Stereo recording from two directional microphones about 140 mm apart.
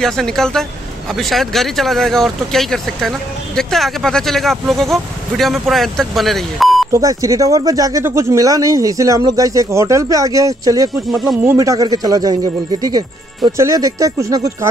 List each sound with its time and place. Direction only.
0.0 s speech: 5° left (ahead or behind)
6.9 s speech: 25° right (ahead or behind)
11.1 s speech: centre (ahead or behind)
11.4 s speech: 25° right (ahead or behind)